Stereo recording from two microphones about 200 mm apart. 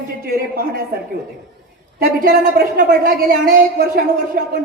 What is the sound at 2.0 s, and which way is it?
A woman's voice, 50° right (ahead or behind).